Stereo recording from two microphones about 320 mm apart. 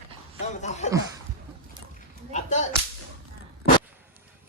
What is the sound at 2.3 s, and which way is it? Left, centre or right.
Whip, left.